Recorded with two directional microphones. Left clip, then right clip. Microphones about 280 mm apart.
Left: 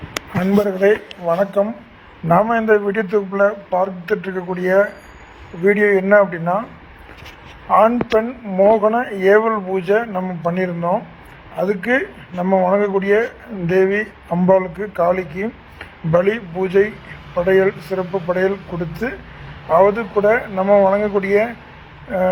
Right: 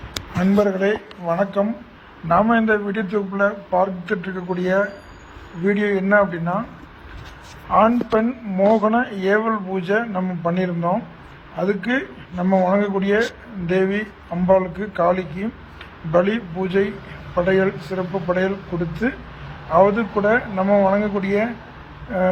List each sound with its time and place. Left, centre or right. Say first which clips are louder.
0.3 s speech: left 1 dB; left
7.7 s speech: left 3 dB; left
11.5 s speech: left 4 dB; left